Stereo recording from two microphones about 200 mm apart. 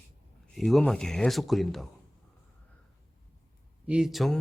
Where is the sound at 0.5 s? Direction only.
Centre (ahead or behind).